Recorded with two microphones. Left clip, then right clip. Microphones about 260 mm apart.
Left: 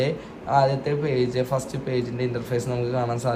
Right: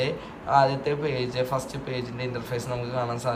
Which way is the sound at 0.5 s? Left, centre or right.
Centre.